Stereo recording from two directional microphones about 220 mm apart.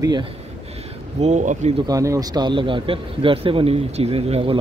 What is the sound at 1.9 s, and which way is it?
A man's voice, 15° right (ahead or behind).